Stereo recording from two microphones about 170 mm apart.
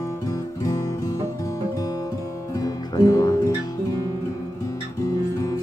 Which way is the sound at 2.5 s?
20° left (ahead or behind).